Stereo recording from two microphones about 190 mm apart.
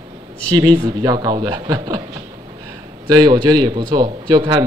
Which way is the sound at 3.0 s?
20° right (ahead or behind).